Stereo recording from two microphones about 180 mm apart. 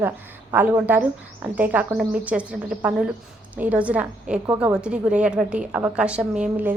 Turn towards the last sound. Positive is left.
turn(degrees=-10)  # may be behind; listen again after turning